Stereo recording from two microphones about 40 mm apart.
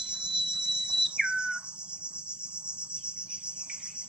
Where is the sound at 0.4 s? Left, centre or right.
Centre.